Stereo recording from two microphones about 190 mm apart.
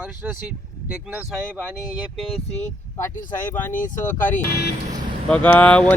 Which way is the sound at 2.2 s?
30° left (ahead or behind).